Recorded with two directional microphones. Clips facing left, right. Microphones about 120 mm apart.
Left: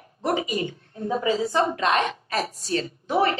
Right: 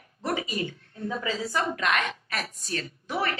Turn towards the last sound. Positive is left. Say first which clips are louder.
# left 7 dB
turn(degrees=25)  # may be behind; listen again after turning